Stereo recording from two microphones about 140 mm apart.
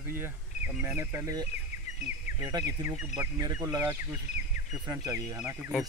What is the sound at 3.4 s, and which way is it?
Speech, 30° right (ahead or behind).